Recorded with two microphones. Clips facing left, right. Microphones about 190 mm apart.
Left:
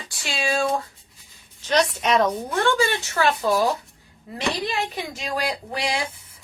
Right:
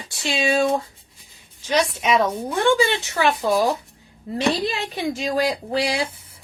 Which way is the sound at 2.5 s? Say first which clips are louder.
Right 6 dB; 15° right (ahead or behind).